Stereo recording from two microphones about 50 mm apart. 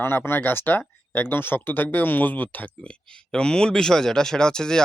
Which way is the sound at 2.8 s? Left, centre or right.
Centre.